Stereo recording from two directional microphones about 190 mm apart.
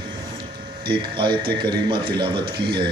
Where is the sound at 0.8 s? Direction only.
25° right (ahead or behind).